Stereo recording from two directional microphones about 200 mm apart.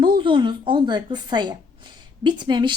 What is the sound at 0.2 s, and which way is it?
A woman's voice, 25° right (ahead or behind).